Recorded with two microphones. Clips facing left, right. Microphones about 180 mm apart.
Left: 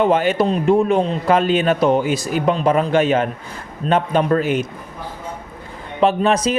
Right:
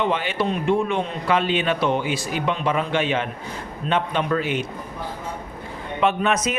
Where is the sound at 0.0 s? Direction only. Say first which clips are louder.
Left 7 dB; 45° left (ahead or behind).